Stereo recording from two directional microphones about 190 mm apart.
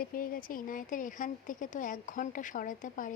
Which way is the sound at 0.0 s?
45° left (ahead or behind).